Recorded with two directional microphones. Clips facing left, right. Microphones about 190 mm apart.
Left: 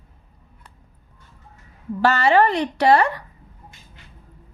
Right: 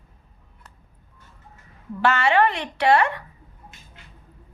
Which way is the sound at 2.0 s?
35° left (ahead or behind).